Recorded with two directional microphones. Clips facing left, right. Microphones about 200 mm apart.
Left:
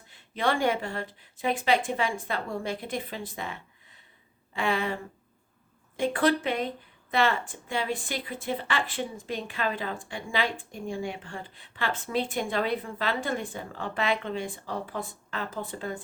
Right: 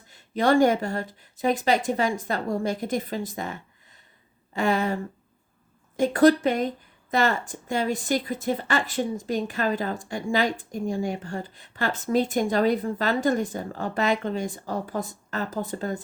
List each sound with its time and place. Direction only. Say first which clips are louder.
0.1 s speech: right 7 dB; 40° right (ahead or behind)
6.0 s speech: right 7 dB; 40° right (ahead or behind)